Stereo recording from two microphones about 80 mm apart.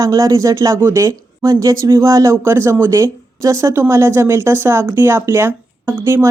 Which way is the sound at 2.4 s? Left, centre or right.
Right.